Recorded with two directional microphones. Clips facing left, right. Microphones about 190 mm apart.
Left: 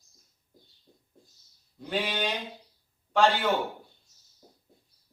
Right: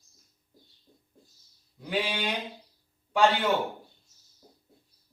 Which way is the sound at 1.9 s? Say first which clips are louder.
Even; 10° right (ahead or behind).